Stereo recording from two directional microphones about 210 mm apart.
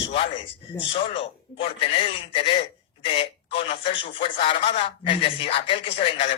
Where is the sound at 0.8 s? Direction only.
25° left (ahead or behind).